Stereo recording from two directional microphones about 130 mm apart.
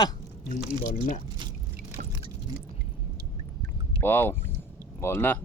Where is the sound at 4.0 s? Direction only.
15° left (ahead or behind).